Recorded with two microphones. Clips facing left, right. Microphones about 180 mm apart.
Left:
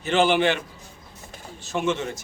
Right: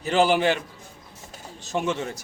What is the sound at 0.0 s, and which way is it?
Speech, 35° right (ahead or behind).